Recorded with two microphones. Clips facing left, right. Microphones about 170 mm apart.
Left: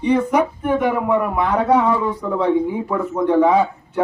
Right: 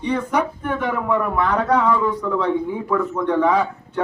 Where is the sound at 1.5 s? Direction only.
25° left (ahead or behind).